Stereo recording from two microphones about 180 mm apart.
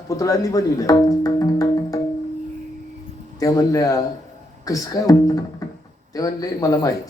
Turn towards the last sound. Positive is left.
turn(degrees=20)  # may be behind; listen again after turning